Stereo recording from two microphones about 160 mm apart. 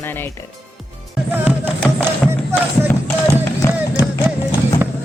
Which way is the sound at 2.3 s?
15° right (ahead or behind).